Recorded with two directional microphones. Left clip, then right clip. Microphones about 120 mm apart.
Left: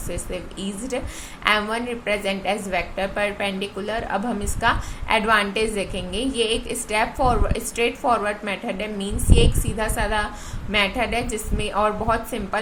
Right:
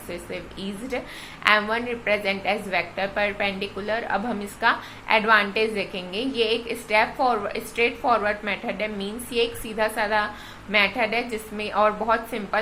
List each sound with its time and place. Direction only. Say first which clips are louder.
0.1 s a woman's voice: left 2 dB; 35° left (ahead or behind)